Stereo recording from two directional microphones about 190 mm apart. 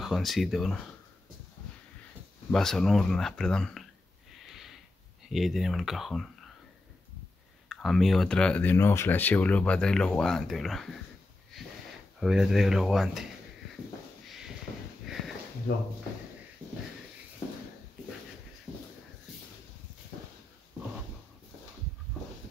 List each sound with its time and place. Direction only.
0.0 s speech: centre (ahead or behind)
2.5 s speech: centre (ahead or behind)
5.3 s speech: centre (ahead or behind)
7.6 s speech: centre (ahead or behind)
12.2 s speech: centre (ahead or behind)
14.2 s a sound: centre (ahead or behind)
15.0 s sniff: centre (ahead or behind)
15.7 s speech: 55° left (ahead or behind)